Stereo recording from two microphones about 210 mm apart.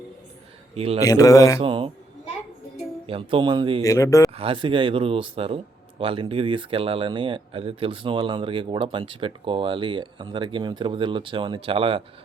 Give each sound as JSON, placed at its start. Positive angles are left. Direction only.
{"t": 0.7, "sound": "speech", "side_deg": -30}
{"t": 1.0, "sound": "a man's voice", "side_deg": 15}
{"t": 1.6, "sound": "speech", "side_deg": -25}
{"t": 3.1, "sound": "speech", "side_deg": -25}
{"t": 3.8, "sound": "a man's voice", "side_deg": 15}
{"t": 4.4, "sound": "speech", "side_deg": -25}